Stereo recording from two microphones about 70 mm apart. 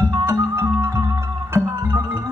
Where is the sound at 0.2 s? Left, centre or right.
Right.